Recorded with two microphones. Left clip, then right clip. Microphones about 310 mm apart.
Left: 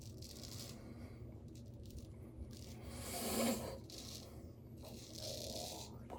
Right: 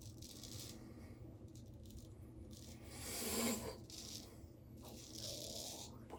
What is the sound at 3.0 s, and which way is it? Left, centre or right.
Rub, centre.